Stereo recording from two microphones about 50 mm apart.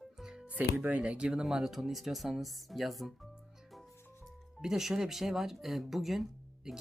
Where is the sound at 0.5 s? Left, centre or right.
Right.